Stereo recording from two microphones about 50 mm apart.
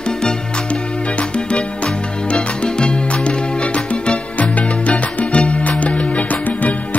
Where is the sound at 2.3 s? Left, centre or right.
Left.